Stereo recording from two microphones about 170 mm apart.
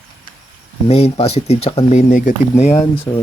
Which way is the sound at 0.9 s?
35° left (ahead or behind).